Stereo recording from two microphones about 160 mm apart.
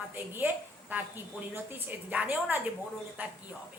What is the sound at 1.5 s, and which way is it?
A woman's voice, 10° right (ahead or behind).